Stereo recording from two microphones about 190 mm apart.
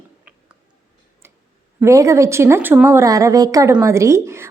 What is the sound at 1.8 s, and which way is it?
A woman's voice, 15° right (ahead or behind).